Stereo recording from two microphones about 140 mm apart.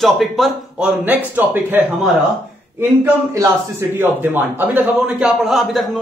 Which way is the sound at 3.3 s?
20° right (ahead or behind).